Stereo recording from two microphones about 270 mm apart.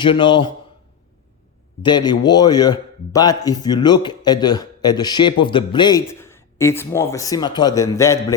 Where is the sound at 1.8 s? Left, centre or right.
Centre.